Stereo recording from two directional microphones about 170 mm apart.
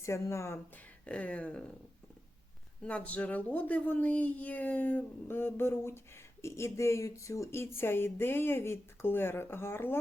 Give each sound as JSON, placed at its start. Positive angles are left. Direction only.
{"t": 0.0, "sound": "speech", "side_deg": 15}
{"t": 2.8, "sound": "speech", "side_deg": 10}